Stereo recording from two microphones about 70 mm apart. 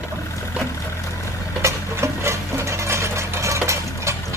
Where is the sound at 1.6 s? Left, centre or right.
Right.